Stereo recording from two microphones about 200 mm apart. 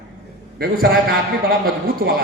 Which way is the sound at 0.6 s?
50° right (ahead or behind).